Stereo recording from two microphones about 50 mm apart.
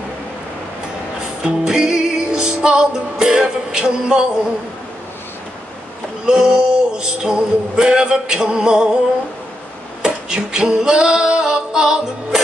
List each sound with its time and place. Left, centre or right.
1.4 s music: centre
6.2 s music: centre
10.0 s music: centre